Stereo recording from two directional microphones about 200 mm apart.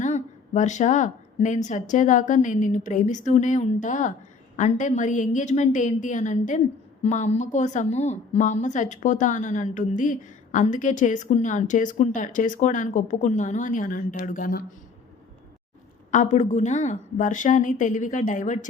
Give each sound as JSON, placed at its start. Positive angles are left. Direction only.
{"t": 0.0, "sound": "a woman's voice", "side_deg": 35}
{"t": 16.1, "sound": "a woman's voice", "side_deg": 35}